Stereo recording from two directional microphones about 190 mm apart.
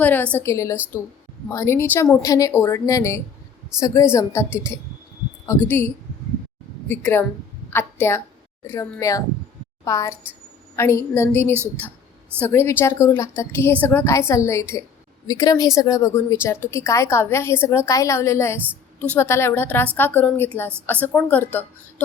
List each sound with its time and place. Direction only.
0.0 s a woman's voice: 10° left (ahead or behind)
5.5 s a woman's voice: 15° left (ahead or behind)